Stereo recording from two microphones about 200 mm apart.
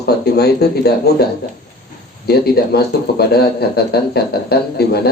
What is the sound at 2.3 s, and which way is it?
A man's voice, 55° left (ahead or behind).